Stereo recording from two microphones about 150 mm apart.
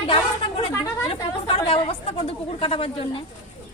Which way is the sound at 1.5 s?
40° left (ahead or behind).